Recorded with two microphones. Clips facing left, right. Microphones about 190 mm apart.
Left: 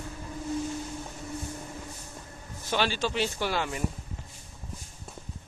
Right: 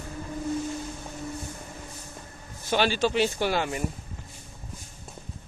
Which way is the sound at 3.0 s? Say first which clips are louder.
Right 5 dB; 60° right (ahead or behind).